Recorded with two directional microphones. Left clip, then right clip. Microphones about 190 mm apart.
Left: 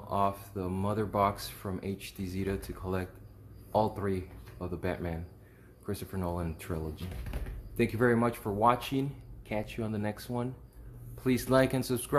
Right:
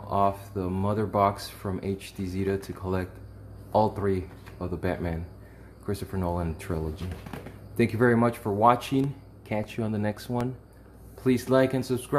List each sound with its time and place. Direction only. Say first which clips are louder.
0.1 s speech: right 5 dB; 10° left (ahead or behind)
11.2 s speech: right 4 dB; 20° left (ahead or behind)